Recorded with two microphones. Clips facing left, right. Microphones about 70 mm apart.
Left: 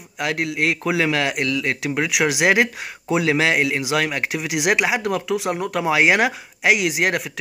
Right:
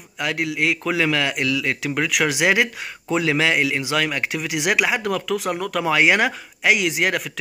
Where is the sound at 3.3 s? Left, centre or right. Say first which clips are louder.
Left 1 dB; left.